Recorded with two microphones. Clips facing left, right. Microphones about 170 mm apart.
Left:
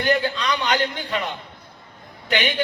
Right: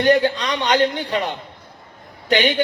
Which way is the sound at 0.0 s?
35° right (ahead or behind).